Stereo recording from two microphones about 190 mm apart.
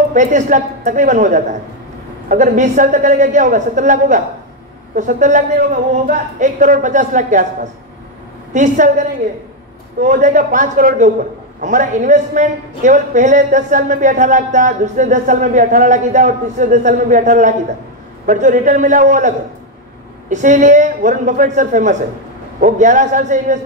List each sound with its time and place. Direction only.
0.1 s a woman's voice: 40° right (ahead or behind)
8.5 s a woman's voice: 40° right (ahead or behind)
10.0 s a man's voice: 45° right (ahead or behind)